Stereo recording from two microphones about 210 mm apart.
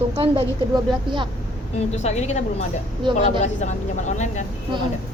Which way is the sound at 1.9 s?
30° left (ahead or behind).